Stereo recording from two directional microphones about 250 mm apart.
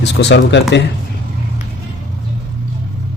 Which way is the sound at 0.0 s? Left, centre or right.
Left.